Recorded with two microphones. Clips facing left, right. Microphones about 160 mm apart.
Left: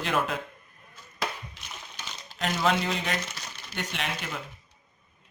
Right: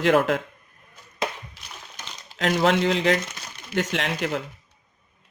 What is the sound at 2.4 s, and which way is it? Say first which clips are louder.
Speech: right 6 dB; 90° right.